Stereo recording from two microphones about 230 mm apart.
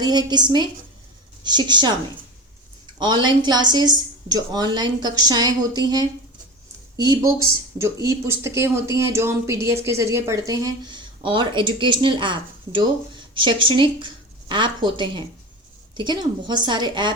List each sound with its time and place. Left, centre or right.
0.0 s a woman's voice: centre
3.0 s a woman's voice: centre